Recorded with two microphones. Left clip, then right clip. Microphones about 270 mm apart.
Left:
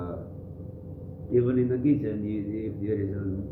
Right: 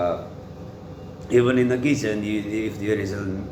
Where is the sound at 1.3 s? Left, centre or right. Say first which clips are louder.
Right 6 dB; centre.